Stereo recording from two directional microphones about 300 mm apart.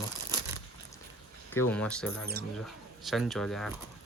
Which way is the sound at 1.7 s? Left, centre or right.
Centre.